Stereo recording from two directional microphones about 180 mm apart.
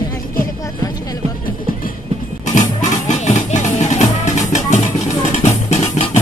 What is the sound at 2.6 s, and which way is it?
Music, 45° left (ahead or behind).